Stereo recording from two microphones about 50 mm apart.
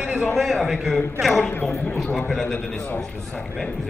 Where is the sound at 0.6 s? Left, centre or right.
Centre.